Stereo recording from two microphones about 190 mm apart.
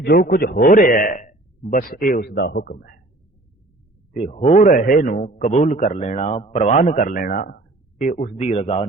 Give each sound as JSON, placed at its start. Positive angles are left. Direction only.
{"t": 0.0, "sound": "a man's voice", "side_deg": 55}
{"t": 4.1, "sound": "a man's voice", "side_deg": 40}